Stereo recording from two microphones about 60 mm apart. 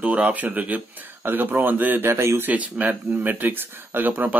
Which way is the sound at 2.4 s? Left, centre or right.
Right.